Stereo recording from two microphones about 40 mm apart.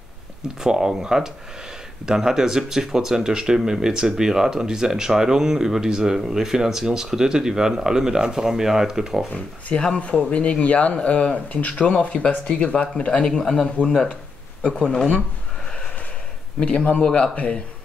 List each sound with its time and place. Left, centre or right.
0.6 s speech: centre
9.3 s speech: left
13.4 s speech: centre
14.6 s speech: left
16.5 s speech: left